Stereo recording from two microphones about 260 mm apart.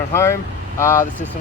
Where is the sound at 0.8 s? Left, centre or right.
Centre.